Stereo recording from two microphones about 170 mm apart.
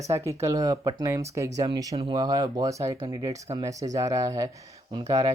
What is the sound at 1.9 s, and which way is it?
Speech, 35° right (ahead or behind).